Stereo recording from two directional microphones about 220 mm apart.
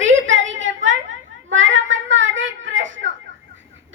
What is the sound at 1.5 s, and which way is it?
Child singing, 60° right (ahead or behind).